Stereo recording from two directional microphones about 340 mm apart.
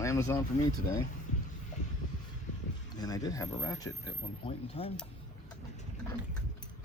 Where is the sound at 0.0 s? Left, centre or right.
Centre.